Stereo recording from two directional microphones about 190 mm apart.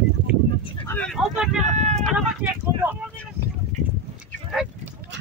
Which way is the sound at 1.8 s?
35° right (ahead or behind).